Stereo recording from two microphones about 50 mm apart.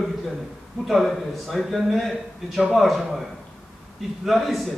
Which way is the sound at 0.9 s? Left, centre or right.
Centre.